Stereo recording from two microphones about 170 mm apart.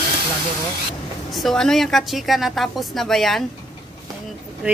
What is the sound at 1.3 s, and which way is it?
A woman's voice, centre (ahead or behind).